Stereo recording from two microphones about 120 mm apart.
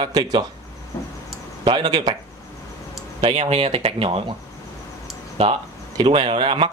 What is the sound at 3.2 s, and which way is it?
Speech, 55° right (ahead or behind).